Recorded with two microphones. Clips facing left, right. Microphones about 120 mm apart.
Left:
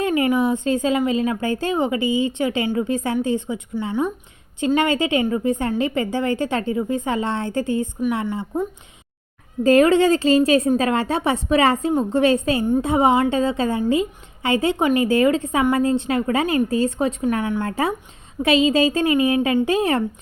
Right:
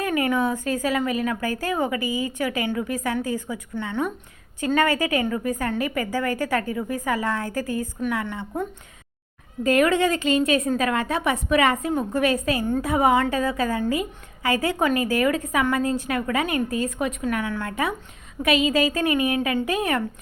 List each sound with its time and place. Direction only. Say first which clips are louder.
0.0 s a woman's voice: left 4 dB; 25° left (ahead or behind)
9.6 s a woman's voice: left 5 dB; 30° left (ahead or behind)